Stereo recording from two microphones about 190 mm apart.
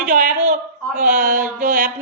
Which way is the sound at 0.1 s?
40° right (ahead or behind).